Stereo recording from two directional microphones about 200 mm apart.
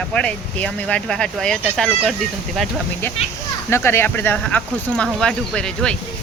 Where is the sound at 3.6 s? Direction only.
10° left (ahead or behind).